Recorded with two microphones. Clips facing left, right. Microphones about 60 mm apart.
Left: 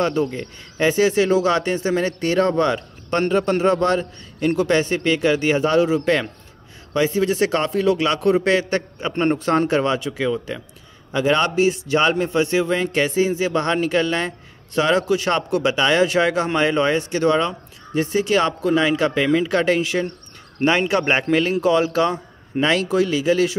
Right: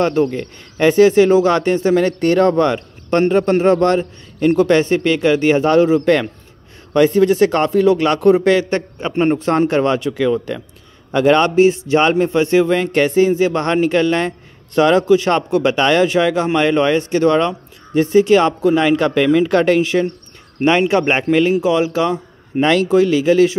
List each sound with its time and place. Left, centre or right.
0.0 s speech: right
6.9 s speech: right
9.1 s a man's voice: centre
9.4 s speech: right
20.9 s speech: right